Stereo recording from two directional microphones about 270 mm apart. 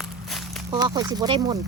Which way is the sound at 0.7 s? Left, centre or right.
Centre.